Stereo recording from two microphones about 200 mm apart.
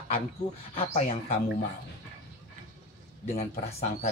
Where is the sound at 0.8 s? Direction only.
30° left (ahead or behind).